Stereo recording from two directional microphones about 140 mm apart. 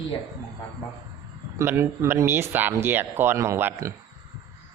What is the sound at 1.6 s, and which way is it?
Speech, 20° right (ahead or behind).